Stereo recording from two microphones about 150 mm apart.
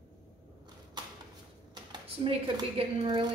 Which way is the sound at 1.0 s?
30° right (ahead or behind).